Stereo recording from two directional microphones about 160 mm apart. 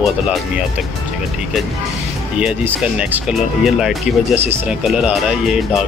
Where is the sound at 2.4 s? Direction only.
10° right (ahead or behind).